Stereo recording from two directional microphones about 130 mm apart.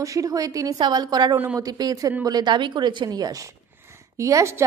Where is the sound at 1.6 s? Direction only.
30° right (ahead or behind).